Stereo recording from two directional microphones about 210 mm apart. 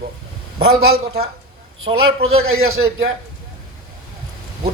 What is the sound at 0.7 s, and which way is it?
Speech, 80° right.